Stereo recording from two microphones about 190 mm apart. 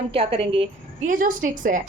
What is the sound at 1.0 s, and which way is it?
Speech, 45° right (ahead or behind).